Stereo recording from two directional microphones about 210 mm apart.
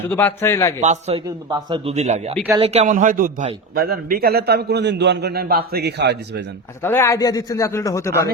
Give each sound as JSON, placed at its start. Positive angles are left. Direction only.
{"t": 0.1, "sound": "speech", "side_deg": 10}
{"t": 0.8, "sound": "a man's voice", "side_deg": -30}
{"t": 6.8, "sound": "speech", "side_deg": 10}